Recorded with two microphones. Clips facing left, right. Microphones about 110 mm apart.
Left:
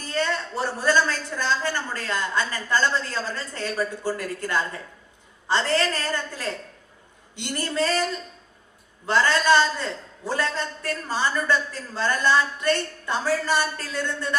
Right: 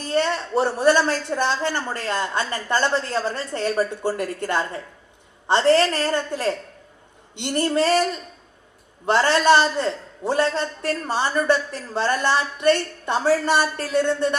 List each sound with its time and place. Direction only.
0.0 s a woman's voice: 20° right (ahead or behind)
9.0 s a woman's voice: 25° right (ahead or behind)